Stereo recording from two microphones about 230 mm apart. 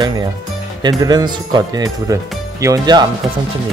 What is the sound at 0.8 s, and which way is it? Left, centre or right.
Speech, centre.